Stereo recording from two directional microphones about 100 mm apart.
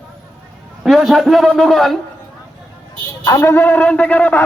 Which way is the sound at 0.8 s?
Centre (ahead or behind).